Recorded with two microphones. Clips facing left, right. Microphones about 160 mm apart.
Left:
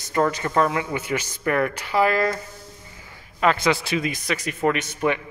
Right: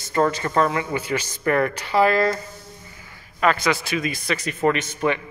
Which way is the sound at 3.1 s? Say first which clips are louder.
Even; 20° left (ahead or behind).